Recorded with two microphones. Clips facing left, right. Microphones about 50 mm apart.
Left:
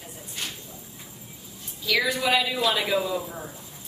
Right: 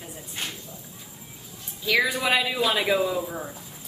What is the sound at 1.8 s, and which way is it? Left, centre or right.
A man's voice, centre.